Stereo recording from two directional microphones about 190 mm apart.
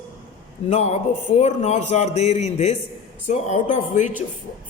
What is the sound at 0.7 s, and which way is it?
A man's voice, 35° left (ahead or behind).